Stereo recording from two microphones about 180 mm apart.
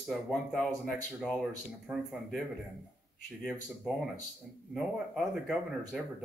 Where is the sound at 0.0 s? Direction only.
Centre (ahead or behind).